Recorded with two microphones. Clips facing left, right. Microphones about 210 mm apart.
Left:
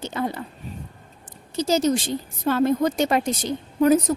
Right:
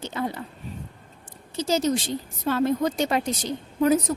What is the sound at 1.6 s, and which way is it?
A woman's voice, 40° left (ahead or behind).